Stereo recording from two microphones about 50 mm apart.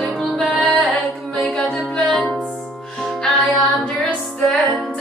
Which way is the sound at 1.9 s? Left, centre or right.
Centre.